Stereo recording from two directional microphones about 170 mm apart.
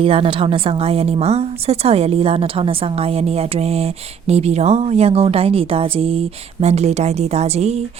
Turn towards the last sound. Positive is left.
turn(degrees=-40)  # may be behind; listen again after turning